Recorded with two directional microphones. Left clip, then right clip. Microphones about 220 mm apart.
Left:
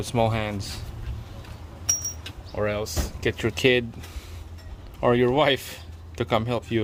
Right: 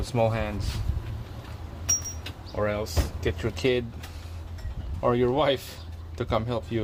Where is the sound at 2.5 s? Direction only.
40° left (ahead or behind).